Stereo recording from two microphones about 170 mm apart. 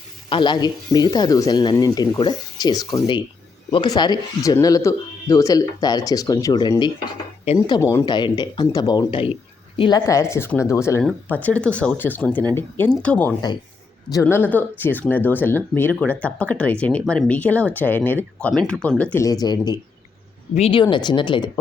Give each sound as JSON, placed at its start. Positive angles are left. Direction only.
{"t": 0.3, "sound": "speech", "side_deg": 25}
{"t": 19.2, "sound": "speech", "side_deg": 20}